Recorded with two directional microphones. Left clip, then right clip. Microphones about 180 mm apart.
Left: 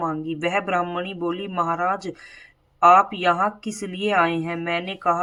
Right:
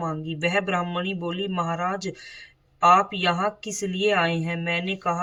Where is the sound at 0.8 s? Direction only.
20° right (ahead or behind).